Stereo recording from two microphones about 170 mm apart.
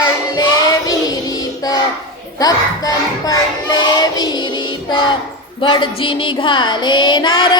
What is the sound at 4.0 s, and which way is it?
Music, 25° left (ahead or behind).